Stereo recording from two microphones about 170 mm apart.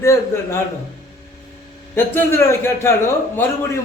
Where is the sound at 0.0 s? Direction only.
15° left (ahead or behind).